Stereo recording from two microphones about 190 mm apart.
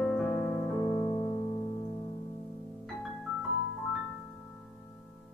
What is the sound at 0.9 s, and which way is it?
Music, 25° left (ahead or behind).